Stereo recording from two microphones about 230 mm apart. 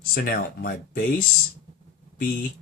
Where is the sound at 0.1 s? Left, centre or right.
Left.